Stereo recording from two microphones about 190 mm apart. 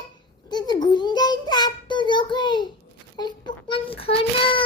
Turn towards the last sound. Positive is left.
turn(degrees=30)  # may be behind; listen again after turning